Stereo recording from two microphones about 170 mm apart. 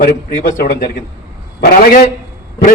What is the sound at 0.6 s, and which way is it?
Speech, 70° left (ahead or behind).